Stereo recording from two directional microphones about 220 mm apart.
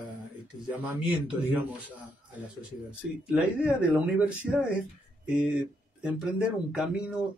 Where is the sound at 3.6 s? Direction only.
5° right (ahead or behind).